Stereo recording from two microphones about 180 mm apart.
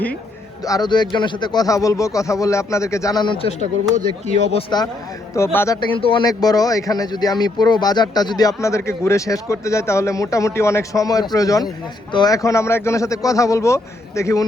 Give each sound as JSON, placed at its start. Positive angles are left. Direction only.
{"t": 0.6, "sound": "speech", "side_deg": 20}
{"t": 4.7, "sound": "a man's voice", "side_deg": 20}
{"t": 5.9, "sound": "a man's voice", "side_deg": 30}